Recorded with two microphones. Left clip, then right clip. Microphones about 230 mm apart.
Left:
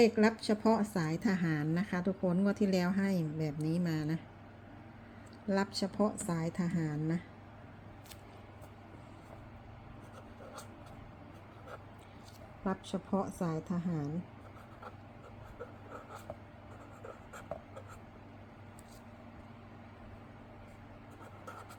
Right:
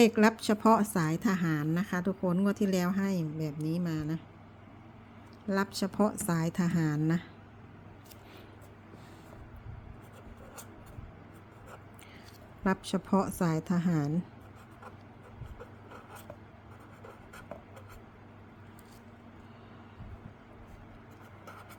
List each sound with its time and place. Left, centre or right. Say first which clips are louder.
0.0 s speech: right 3 dB; right; by 4.2 s centre
5.5 s a woman's voice: right 2 dB; centre
12.6 s a woman's voice: right 6 dB; right